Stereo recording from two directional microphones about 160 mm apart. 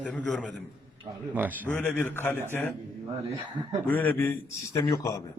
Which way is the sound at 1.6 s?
10° left (ahead or behind).